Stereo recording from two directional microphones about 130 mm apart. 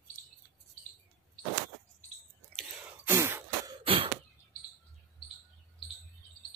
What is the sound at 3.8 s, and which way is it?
Cough, 45° right (ahead or behind).